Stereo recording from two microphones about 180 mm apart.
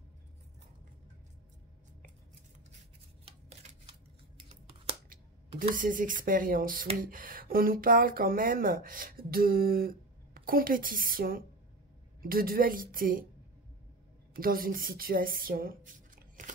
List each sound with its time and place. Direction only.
4.5 s scissors: 35° right (ahead or behind)
5.6 s speech: 50° right (ahead or behind)
14.3 s speech: 55° right (ahead or behind)